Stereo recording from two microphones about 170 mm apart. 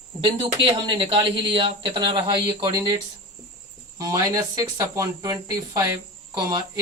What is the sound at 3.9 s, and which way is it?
Speech, 20° right (ahead or behind).